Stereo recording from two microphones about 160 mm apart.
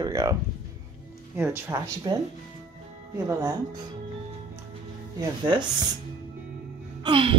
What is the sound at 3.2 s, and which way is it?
Speech, 20° right (ahead or behind).